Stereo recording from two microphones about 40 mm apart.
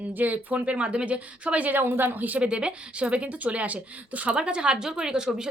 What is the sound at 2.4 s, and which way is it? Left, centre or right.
Speech, right.